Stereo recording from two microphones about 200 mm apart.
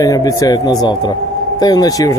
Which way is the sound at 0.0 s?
20° left (ahead or behind).